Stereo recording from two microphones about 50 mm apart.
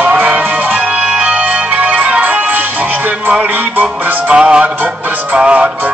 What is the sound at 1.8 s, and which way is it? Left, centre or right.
Organ, right.